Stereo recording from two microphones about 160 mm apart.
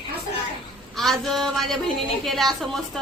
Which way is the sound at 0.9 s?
Centre (ahead or behind).